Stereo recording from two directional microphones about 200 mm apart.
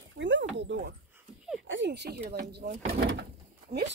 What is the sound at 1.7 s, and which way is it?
Speech, 60° right (ahead or behind).